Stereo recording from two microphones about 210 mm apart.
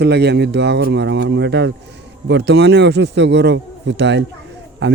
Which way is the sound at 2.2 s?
55° right (ahead or behind).